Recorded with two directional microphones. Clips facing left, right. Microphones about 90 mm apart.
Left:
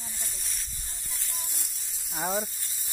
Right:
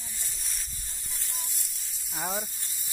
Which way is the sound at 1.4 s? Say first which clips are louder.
Left 1 dB; 55° left (ahead or behind).